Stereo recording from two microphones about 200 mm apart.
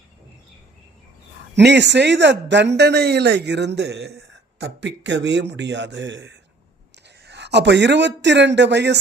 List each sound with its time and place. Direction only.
1.5 s speech: 60° right (ahead or behind)